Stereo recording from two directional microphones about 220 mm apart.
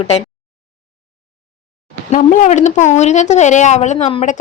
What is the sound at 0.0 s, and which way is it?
Speech, 30° left (ahead or behind).